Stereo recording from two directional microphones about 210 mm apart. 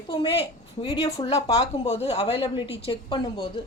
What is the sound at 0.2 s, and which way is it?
A woman's voice, 25° left (ahead or behind).